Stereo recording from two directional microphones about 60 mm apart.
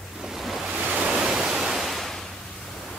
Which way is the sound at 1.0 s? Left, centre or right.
Centre.